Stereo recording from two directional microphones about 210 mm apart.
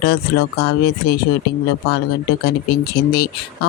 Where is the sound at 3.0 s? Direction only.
50° left (ahead or behind).